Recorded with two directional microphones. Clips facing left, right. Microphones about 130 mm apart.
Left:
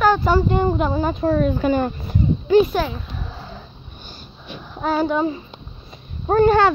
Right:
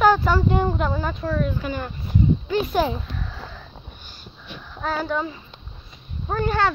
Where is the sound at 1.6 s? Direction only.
35° left (ahead or behind).